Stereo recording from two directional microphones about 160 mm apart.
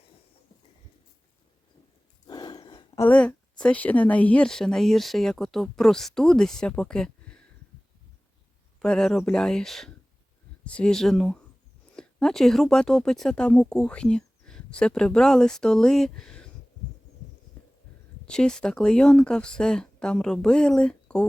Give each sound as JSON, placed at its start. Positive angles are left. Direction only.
{"t": 2.2, "sound": "a sound", "side_deg": 25}
{"t": 3.0, "sound": "a woman's voice", "side_deg": 10}
{"t": 8.8, "sound": "speech", "side_deg": 5}
{"t": 18.3, "sound": "speech", "side_deg": 5}